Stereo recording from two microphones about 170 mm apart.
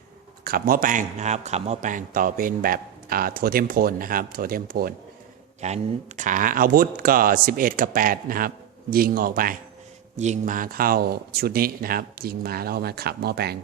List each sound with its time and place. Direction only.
0.4 s a man's voice: 60° right (ahead or behind)
5.5 s a man's voice: 40° right (ahead or behind); by 9.6 s 55° right (ahead or behind)
10.2 s a man's voice: 45° right (ahead or behind); by 13.6 s 70° right (ahead or behind)